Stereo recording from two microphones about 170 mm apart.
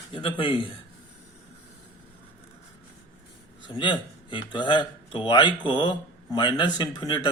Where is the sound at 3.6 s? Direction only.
30° left (ahead or behind).